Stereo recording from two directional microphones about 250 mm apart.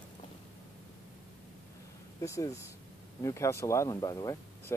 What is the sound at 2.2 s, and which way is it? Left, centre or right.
Speech, centre.